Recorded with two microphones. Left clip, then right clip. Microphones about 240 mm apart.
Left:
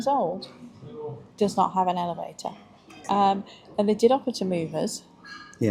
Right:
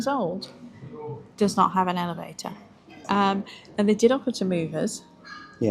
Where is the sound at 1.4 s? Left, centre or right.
Right.